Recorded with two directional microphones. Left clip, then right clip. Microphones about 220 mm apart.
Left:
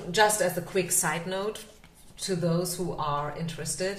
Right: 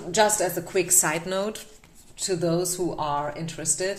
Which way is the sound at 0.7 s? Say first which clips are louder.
Right 4 dB; 45° right (ahead or behind).